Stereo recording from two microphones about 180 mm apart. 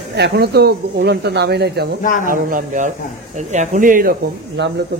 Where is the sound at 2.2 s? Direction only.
50° right (ahead or behind).